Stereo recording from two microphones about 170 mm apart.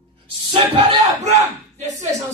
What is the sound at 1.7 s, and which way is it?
Speech, 45° right (ahead or behind).